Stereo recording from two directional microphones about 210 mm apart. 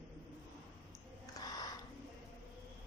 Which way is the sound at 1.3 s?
20° left (ahead or behind).